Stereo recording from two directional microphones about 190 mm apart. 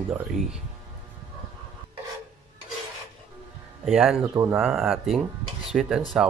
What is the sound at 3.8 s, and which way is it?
Speech, 5° right (ahead or behind).